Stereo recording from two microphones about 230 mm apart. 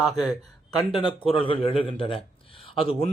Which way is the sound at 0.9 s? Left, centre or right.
Left.